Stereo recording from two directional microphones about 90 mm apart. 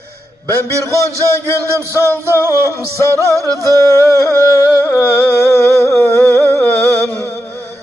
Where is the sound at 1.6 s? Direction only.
30° right (ahead or behind).